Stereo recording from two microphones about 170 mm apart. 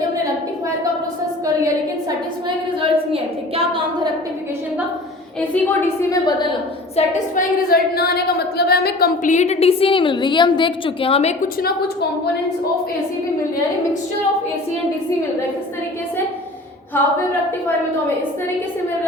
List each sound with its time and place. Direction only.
2.8 s a sound: 35° right (ahead or behind)
5.4 s a woman's voice: 15° left (ahead or behind)
6.9 s a woman's voice: 45° left (ahead or behind)
7.7 s a woman's voice: 65° left (ahead or behind); by 11.3 s 35° left (ahead or behind)